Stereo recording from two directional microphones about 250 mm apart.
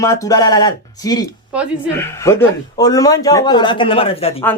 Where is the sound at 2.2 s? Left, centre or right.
Centre.